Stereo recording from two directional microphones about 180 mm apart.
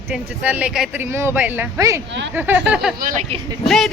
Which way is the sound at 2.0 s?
75° right (ahead or behind).